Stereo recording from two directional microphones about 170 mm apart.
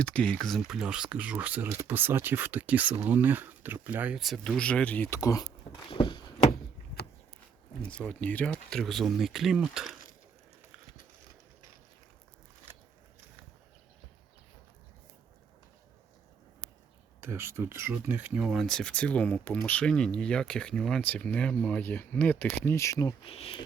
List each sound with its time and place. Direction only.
0.0 s speech: 5° left (ahead or behind)
5.9 s a sound: 30° left (ahead or behind)
7.9 s speech: 5° left (ahead or behind)
17.2 s speech: 15° right (ahead or behind); by 23.1 s 20° left (ahead or behind)
23.2 s speech: 35° left (ahead or behind)